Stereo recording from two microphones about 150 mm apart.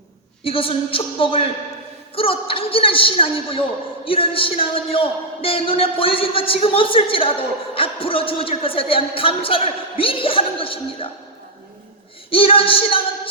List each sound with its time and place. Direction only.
0.4 s speech: 40° left (ahead or behind)
12.3 s speech: 40° left (ahead or behind)